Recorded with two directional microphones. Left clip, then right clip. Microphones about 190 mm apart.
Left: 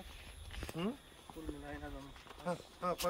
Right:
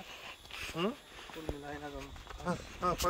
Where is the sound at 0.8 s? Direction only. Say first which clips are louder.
Right 6 dB; 25° right (ahead or behind).